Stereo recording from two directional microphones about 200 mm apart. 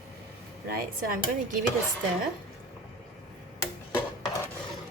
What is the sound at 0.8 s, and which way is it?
Speech, 45° right (ahead or behind).